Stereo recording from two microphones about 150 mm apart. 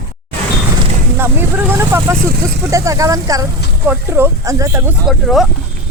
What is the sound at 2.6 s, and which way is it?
Speech, 20° right (ahead or behind).